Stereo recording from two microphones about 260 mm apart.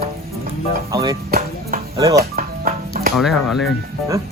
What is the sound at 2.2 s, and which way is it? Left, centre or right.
Music, right.